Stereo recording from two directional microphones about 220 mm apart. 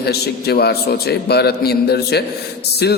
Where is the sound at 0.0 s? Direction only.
45° left (ahead or behind).